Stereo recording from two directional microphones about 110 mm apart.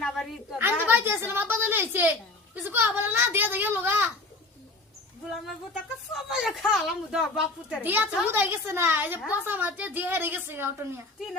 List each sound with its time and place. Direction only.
0.6 s a sound: 20° right (ahead or behind)
2.6 s a child's voice: 20° right (ahead or behind)
6.1 s speech: 5° right (ahead or behind)
7.8 s a woman's voice: 15° right (ahead or behind)